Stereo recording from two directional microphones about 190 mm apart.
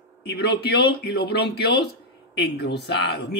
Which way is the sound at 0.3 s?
60° left (ahead or behind).